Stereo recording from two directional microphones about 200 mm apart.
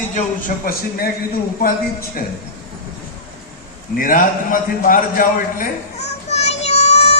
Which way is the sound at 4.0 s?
45° left (ahead or behind).